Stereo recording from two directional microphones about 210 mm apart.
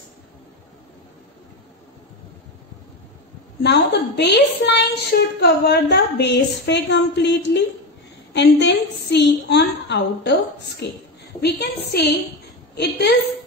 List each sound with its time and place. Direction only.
3.6 s a woman's voice: 55° left (ahead or behind)
12.7 s a woman's voice: 50° left (ahead or behind)